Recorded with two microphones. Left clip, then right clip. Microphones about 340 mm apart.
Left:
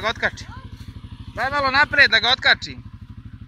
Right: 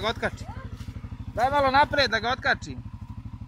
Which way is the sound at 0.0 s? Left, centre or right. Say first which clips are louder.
Left 5 dB; centre.